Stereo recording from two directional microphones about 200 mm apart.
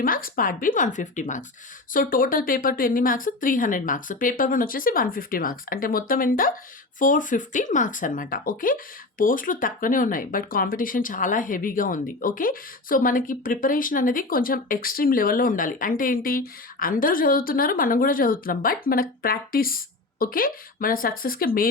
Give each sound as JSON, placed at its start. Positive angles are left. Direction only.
{"t": 0.0, "sound": "speech", "side_deg": 45}